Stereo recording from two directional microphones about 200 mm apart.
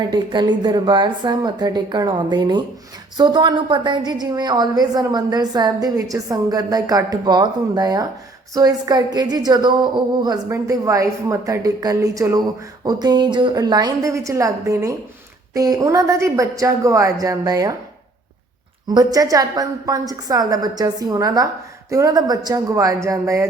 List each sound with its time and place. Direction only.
0.1 s a woman's voice: 20° right (ahead or behind)
18.9 s a woman's voice: 20° right (ahead or behind)